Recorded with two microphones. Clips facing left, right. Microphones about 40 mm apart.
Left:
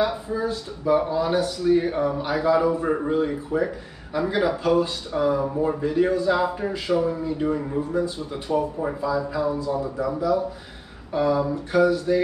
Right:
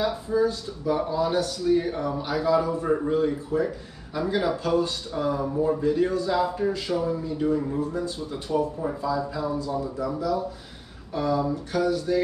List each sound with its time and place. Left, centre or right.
0.0 s speech: centre
3.1 s speech: centre